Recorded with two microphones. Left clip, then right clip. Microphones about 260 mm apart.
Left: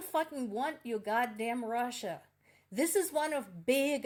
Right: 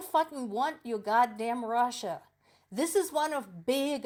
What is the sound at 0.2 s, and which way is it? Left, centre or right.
A woman's voice, right.